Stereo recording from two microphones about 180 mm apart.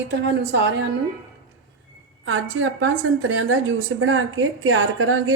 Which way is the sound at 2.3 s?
90° right.